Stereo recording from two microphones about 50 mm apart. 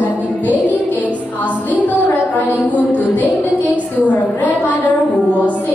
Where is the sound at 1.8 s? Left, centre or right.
Left.